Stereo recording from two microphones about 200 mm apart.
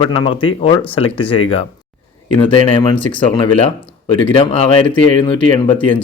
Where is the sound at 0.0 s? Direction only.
25° left (ahead or behind).